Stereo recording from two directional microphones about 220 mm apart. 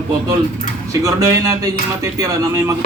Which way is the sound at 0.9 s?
15° right (ahead or behind).